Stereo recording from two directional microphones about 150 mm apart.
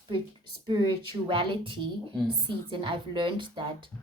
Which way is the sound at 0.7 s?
30° right (ahead or behind).